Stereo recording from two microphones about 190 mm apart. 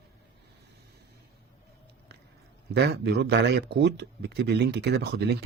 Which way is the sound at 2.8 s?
60° right (ahead or behind).